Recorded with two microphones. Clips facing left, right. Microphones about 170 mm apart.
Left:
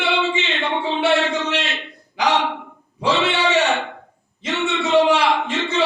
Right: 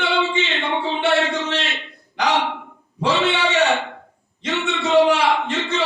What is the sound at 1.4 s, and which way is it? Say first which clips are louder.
Speech: left 1 dB; 20° left (ahead or behind).